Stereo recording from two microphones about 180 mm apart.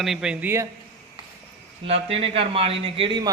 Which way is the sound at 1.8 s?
30° right (ahead or behind).